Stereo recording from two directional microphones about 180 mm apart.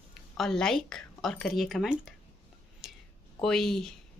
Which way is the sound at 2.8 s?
Centre (ahead or behind).